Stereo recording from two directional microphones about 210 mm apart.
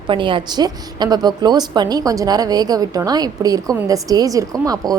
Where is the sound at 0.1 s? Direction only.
25° right (ahead or behind).